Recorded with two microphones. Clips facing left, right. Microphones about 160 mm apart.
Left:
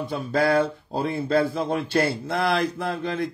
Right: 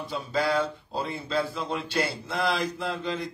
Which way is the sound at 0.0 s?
55° left (ahead or behind).